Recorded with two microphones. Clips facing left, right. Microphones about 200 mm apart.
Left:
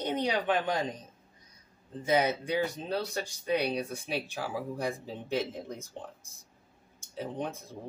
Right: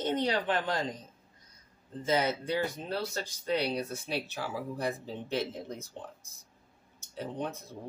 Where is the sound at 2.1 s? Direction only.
15° left (ahead or behind).